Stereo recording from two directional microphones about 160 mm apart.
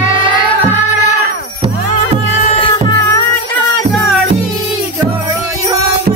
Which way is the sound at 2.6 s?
35° left (ahead or behind).